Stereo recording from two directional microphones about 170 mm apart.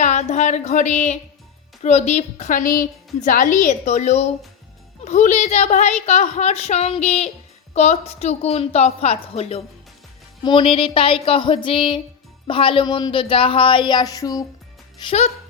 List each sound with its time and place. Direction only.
0.0 s speech: 45° left (ahead or behind); by 14.4 s 20° left (ahead or behind)